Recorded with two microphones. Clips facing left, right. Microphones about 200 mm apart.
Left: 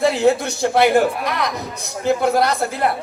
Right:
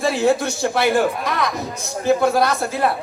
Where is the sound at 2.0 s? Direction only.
20° left (ahead or behind).